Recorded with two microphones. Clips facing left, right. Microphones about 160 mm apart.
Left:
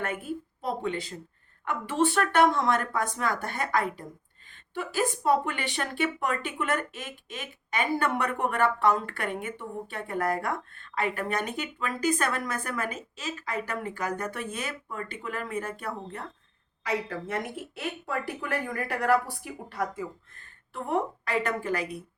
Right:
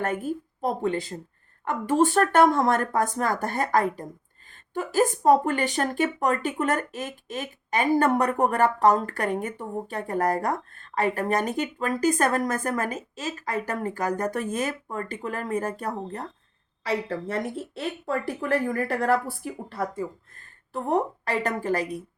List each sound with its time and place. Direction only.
0.0 s speech: 40° right (ahead or behind)